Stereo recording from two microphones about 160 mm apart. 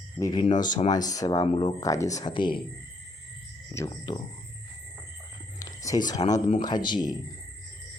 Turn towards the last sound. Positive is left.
turn(degrees=25)  # may be behind; listen again after turning